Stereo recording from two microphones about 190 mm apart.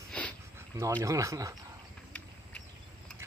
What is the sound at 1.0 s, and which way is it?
Speech, 15° right (ahead or behind).